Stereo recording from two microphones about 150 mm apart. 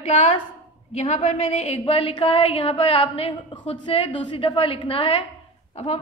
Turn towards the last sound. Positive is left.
turn(degrees=45)  # may be behind; listen again after turning